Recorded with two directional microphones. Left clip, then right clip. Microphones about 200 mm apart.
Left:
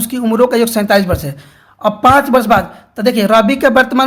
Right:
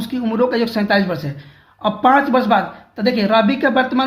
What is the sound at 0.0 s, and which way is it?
Speech, 40° left (ahead or behind).